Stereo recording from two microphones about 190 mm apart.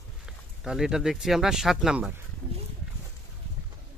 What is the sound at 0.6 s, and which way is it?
Speech, 5° right (ahead or behind).